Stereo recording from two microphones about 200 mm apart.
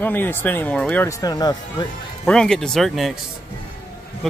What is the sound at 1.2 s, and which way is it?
Speech, 20° left (ahead or behind).